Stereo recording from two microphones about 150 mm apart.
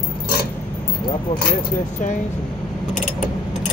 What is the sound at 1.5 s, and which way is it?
Speech, 55° left (ahead or behind).